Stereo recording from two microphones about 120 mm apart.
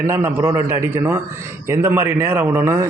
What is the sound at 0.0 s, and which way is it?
A man's voice, 20° right (ahead or behind).